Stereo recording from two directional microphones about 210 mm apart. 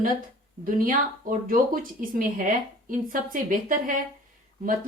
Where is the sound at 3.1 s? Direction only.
40° right (ahead or behind).